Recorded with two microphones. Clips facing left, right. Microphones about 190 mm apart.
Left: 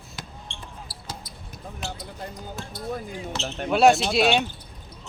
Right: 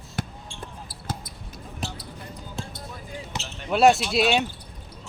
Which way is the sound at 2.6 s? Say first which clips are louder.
Right 6 dB; 25° right (ahead or behind).